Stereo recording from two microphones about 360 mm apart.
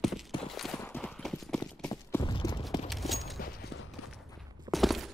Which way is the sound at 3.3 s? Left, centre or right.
Left.